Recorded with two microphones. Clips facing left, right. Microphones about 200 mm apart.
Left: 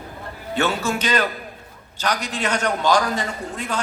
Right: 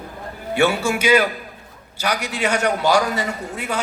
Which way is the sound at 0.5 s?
10° right (ahead or behind).